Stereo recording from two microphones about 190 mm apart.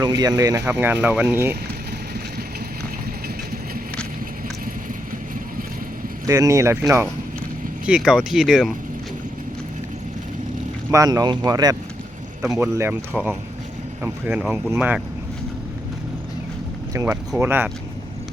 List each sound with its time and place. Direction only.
0.0 s speech: 20° right (ahead or behind)
6.2 s speech: 15° right (ahead or behind)
7.9 s speech: 5° right (ahead or behind)
10.9 s speech: 20° right (ahead or behind)
16.9 s speech: 15° right (ahead or behind)